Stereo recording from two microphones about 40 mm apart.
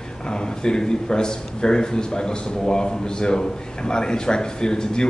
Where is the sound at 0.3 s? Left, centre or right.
Centre.